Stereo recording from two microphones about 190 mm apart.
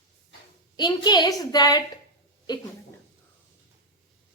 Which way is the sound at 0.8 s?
20° left (ahead or behind).